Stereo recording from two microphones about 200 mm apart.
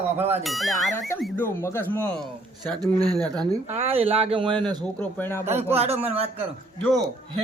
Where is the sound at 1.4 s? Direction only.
10° left (ahead or behind).